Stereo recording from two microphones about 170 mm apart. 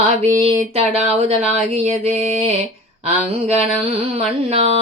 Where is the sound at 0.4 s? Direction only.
35° right (ahead or behind).